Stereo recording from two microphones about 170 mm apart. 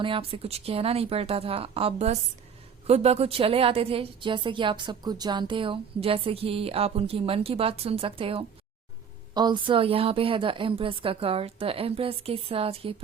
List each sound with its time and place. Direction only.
0.0 s a woman's voice: 30° right (ahead or behind)